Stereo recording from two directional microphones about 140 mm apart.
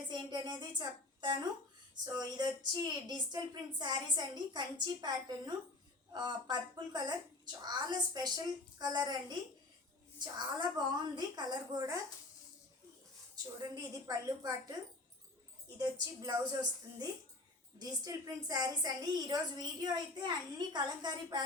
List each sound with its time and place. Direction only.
0.1 s a woman's voice: 30° right (ahead or behind)
13.3 s a child's voice: 25° right (ahead or behind)
15.8 s a child's voice: 30° right (ahead or behind)